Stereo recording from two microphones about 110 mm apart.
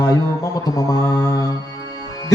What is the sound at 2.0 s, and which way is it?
Music, 35° left (ahead or behind).